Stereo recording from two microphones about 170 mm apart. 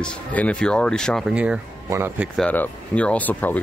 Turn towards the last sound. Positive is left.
turn(degrees=10)  # may be behind; listen again after turning